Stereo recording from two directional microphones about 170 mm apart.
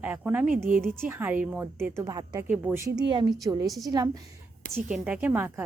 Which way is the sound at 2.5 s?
10° right (ahead or behind).